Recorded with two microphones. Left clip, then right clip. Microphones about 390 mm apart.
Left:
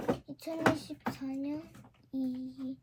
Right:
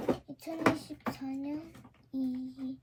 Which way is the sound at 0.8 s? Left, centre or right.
Centre.